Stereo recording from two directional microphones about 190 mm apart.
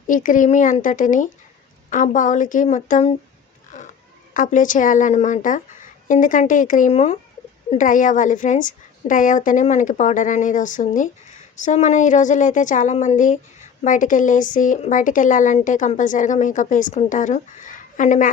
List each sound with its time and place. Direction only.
0.1 s a woman's voice: 45° left (ahead or behind)
3.7 s a sound: 40° left (ahead or behind)
4.4 s a woman's voice: 40° left (ahead or behind)